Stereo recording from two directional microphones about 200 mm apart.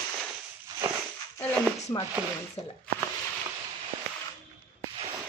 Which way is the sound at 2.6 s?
30° left (ahead or behind).